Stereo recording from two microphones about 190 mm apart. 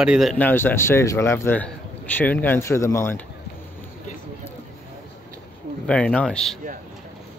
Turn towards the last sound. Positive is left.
turn(degrees=5)  # may be behind; listen again after turning